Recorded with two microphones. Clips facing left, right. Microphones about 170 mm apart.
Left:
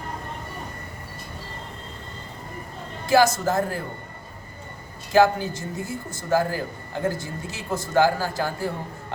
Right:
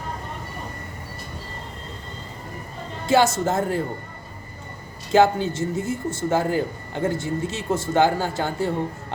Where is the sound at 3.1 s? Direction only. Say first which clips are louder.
Even; 25° right (ahead or behind).